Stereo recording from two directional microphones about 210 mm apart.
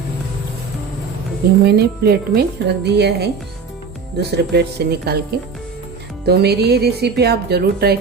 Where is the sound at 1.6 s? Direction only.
50° right (ahead or behind).